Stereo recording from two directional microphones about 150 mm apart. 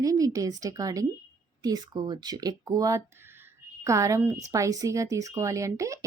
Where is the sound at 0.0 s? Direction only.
25° right (ahead or behind).